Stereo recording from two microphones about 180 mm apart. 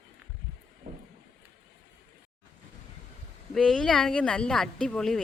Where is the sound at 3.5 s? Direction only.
5° left (ahead or behind).